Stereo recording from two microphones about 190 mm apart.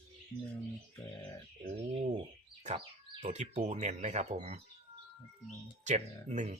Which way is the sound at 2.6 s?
35° right (ahead or behind).